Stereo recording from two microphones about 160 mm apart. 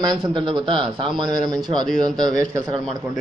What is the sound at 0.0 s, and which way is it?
Speech, 25° right (ahead or behind).